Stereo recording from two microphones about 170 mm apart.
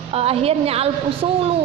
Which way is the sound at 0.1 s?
35° right (ahead or behind).